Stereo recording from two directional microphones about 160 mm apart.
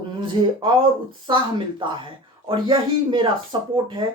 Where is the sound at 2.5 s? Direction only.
30° right (ahead or behind).